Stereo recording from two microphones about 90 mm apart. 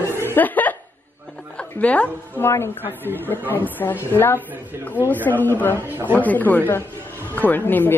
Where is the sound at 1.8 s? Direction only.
15° left (ahead or behind).